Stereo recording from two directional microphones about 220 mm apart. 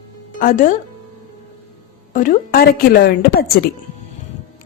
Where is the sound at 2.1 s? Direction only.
40° left (ahead or behind).